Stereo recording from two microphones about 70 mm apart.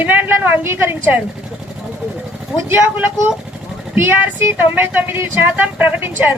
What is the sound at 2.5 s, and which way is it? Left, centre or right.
Speech, right.